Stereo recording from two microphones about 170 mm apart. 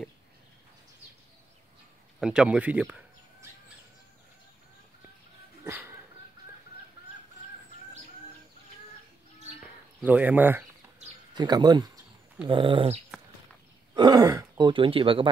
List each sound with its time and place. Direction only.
2.1 s speech: 5° right (ahead or behind)
5.6 s dog: 15° right (ahead or behind)
9.6 s a sound: 10° right (ahead or behind)
11.3 s speech: 25° right (ahead or behind)